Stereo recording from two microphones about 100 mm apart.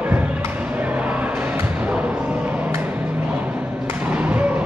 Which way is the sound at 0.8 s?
15° right (ahead or behind).